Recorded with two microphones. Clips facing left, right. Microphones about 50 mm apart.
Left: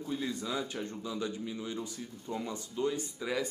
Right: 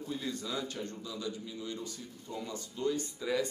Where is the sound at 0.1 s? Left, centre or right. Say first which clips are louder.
Left 2 dB; centre.